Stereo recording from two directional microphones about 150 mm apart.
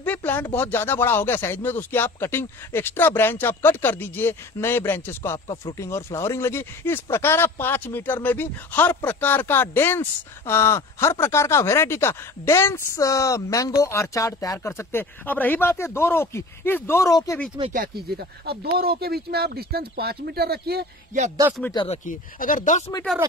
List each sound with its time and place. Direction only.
0.0 s speech: 10° left (ahead or behind)
18.1 s speech: 90° right
21.8 s speech: 45° left (ahead or behind)
22.4 s speech: 65° left (ahead or behind)